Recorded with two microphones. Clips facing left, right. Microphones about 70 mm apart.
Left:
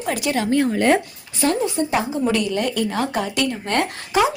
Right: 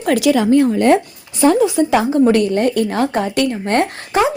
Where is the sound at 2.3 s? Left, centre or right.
Right.